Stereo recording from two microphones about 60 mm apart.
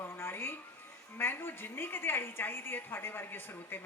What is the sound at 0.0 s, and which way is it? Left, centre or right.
Music, left.